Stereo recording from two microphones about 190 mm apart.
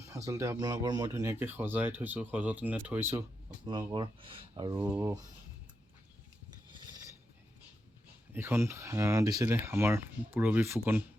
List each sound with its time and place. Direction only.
0.1 s speech: 15° right (ahead or behind)
3.7 s speech: 25° right (ahead or behind)
4.8 s speech: 10° right (ahead or behind)
6.7 s pulleys: 25° right (ahead or behind)
8.3 s speech: 10° right (ahead or behind)